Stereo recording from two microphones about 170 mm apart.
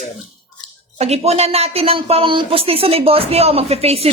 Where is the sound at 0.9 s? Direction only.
40° right (ahead or behind).